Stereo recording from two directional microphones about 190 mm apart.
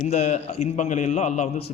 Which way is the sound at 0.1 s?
35° left (ahead or behind).